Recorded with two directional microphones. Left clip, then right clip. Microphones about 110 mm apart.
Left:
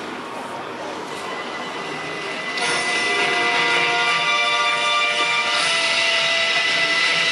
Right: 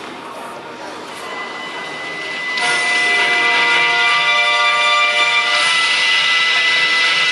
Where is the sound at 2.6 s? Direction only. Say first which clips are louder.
Right 6 dB; 15° right (ahead or behind).